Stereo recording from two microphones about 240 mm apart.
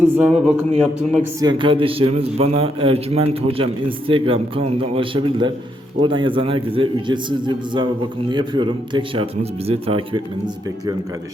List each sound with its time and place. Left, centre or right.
0.0 s speech: centre
1.4 s a man's voice: centre